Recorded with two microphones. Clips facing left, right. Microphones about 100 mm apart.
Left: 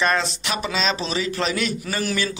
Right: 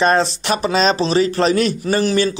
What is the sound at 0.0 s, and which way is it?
A man's voice, 35° right (ahead or behind).